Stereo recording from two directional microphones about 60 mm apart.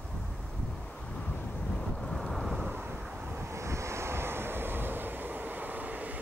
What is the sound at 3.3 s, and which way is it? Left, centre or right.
Vehicle, right.